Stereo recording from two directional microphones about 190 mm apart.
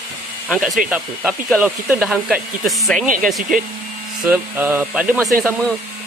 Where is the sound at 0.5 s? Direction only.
Centre (ahead or behind).